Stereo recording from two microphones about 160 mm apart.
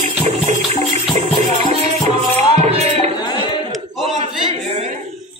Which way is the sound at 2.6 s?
40° right (ahead or behind).